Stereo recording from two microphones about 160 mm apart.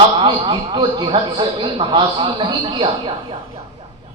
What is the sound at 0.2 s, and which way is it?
A man's voice, 30° right (ahead or behind).